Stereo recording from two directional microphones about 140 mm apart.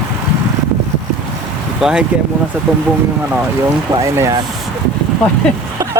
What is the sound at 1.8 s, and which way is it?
Speech, 5° right (ahead or behind).